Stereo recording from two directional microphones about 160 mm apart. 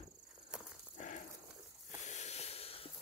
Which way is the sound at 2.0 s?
45° left (ahead or behind).